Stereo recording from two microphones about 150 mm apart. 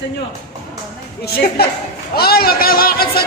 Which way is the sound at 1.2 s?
90° left.